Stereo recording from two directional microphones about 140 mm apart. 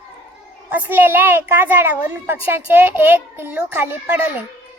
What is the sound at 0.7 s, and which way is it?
A child's voice, 10° right (ahead or behind).